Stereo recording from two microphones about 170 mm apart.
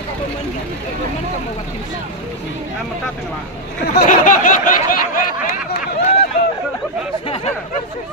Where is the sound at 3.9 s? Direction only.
50° left (ahead or behind).